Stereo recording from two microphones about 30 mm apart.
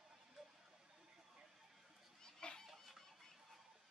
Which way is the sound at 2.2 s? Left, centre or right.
Left.